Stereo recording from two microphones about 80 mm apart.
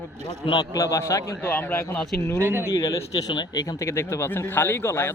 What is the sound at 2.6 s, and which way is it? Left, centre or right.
Speech, left.